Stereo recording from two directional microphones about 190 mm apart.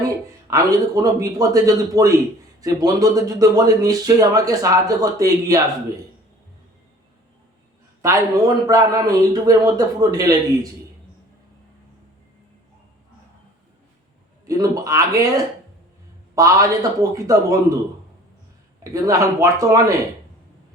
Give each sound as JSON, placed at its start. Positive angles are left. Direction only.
{"t": 0.5, "sound": "a man's voice", "side_deg": -20}
{"t": 8.0, "sound": "speech", "side_deg": -20}
{"t": 14.4, "sound": "a man's voice", "side_deg": -15}
{"t": 16.3, "sound": "a man's voice", "side_deg": -15}
{"t": 18.8, "sound": "a man's voice", "side_deg": -15}